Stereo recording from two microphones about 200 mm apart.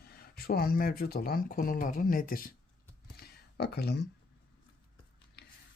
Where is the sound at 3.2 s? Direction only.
55° left (ahead or behind).